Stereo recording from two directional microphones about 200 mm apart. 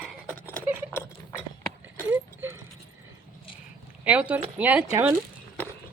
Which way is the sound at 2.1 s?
10° right (ahead or behind).